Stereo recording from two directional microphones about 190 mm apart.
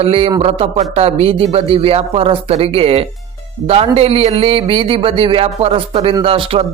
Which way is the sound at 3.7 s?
30° right (ahead or behind).